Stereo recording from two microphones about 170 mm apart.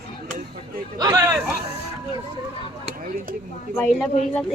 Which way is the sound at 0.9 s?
20° right (ahead or behind).